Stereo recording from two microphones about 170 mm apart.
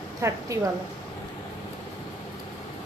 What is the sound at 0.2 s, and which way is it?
Speech, 15° right (ahead or behind).